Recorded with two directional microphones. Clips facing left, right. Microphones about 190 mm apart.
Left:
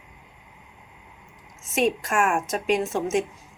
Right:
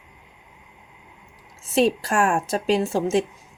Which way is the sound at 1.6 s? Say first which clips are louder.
Right 4 dB; 35° right (ahead or behind).